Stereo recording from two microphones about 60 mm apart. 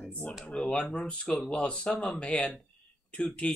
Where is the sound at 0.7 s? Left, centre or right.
Left.